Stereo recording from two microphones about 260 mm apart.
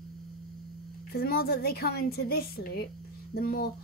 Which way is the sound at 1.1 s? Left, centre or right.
Left.